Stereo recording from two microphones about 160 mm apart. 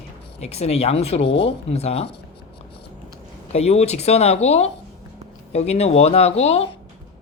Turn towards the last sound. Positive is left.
turn(degrees=40)  # may be behind; listen again after turning